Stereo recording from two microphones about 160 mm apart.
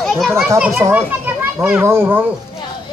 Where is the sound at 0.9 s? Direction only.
10° right (ahead or behind).